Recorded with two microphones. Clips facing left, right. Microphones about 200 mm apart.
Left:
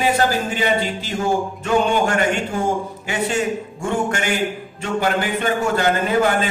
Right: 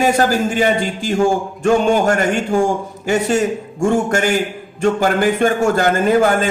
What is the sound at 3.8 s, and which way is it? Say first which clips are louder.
A man's voice: right 7 dB; 45° right (ahead or behind).